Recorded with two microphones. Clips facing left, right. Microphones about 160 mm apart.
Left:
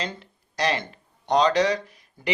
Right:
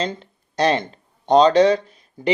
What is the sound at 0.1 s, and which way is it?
Speech, 25° right (ahead or behind).